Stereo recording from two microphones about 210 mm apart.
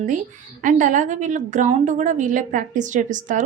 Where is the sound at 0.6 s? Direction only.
35° right (ahead or behind).